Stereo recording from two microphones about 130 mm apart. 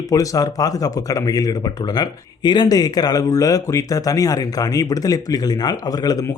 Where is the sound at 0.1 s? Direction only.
30° left (ahead or behind).